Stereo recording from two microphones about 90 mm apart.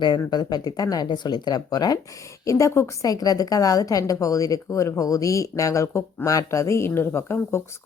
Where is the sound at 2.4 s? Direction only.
35° left (ahead or behind).